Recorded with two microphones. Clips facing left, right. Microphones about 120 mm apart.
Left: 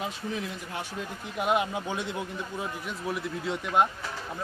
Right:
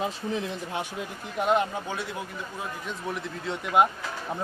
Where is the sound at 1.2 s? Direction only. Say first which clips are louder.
Right 2 dB; 5° left (ahead or behind); by 2.2 s 20° left (ahead or behind).